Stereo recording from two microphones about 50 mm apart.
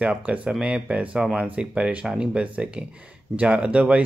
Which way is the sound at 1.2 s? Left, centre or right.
Centre.